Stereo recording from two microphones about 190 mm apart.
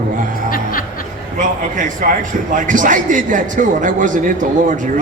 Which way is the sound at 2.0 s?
45° right (ahead or behind).